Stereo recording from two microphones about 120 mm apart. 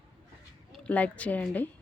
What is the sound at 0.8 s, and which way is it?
Speech, 10° left (ahead or behind).